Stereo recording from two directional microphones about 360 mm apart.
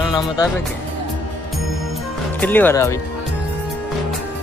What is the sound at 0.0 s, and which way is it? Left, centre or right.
Speech, centre.